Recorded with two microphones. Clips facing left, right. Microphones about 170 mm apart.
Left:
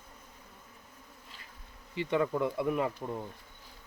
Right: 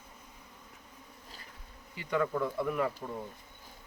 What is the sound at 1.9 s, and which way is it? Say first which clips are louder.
Speech: left 2 dB; 25° left (ahead or behind).